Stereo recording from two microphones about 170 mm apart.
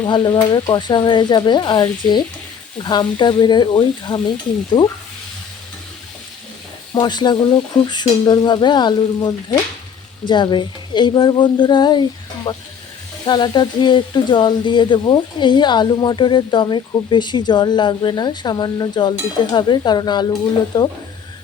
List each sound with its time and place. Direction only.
0.0 s speech: 25° left (ahead or behind)
6.9 s speech: 25° left (ahead or behind)